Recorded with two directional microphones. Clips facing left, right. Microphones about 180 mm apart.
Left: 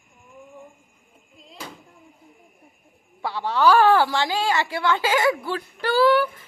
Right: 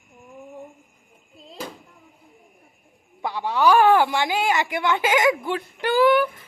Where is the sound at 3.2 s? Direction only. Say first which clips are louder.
Even; 15° right (ahead or behind).